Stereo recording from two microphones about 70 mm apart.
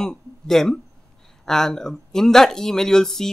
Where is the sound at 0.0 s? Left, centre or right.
Centre.